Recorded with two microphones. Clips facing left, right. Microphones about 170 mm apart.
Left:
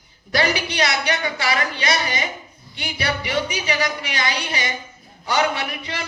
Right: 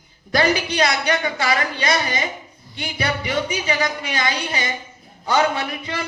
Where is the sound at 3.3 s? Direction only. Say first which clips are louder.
Right 1 dB; 25° right (ahead or behind).